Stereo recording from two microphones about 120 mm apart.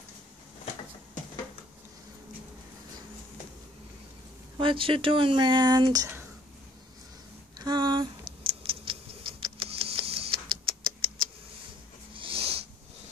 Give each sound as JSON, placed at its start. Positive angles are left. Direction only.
{"t": 4.6, "sound": "speech", "side_deg": -45}
{"t": 7.5, "sound": "scissors", "side_deg": -35}
{"t": 9.4, "sound": "a sound", "side_deg": -50}